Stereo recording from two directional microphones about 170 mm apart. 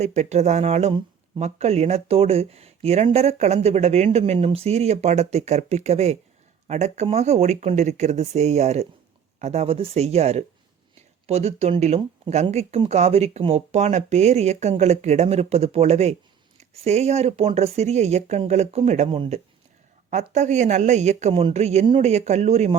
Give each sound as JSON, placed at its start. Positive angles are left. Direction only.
{"t": 0.0, "sound": "speech", "side_deg": -40}